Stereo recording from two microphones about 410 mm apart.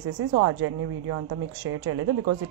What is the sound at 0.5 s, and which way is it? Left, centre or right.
A woman's voice, right.